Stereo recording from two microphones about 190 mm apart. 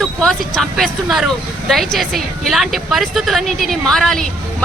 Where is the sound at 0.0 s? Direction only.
5° left (ahead or behind).